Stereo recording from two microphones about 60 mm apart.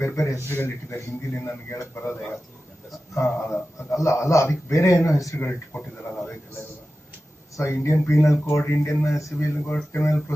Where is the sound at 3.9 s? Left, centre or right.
Left.